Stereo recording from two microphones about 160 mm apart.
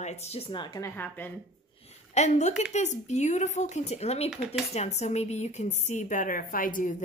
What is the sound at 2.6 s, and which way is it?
A woman's voice, 45° left (ahead or behind).